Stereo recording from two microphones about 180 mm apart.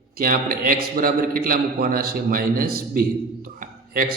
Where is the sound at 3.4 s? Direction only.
55° right (ahead or behind).